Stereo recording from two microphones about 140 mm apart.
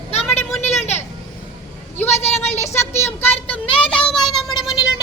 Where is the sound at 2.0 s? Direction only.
50° left (ahead or behind).